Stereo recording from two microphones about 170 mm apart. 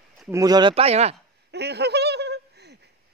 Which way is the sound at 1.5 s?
80° right.